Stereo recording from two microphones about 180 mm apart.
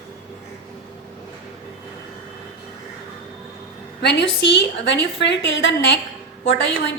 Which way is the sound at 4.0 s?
75° left (ahead or behind).